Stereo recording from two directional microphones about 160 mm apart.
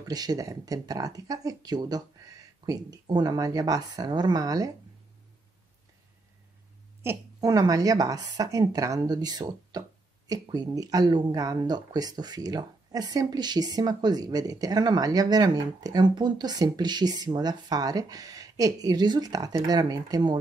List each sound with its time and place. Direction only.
0.1 s a woman's voice: 25° right (ahead or behind)
7.0 s a woman's voice: 20° right (ahead or behind)